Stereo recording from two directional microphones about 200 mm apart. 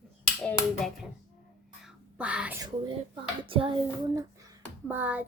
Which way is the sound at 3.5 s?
25° right (ahead or behind).